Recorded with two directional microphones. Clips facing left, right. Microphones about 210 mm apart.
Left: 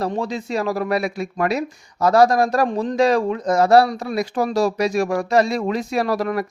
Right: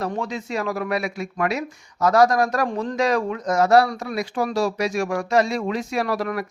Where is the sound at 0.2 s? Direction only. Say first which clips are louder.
Left 3 dB; 35° left (ahead or behind).